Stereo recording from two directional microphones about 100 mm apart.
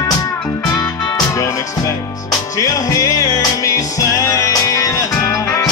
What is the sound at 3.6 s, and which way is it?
Music, 35° left (ahead or behind).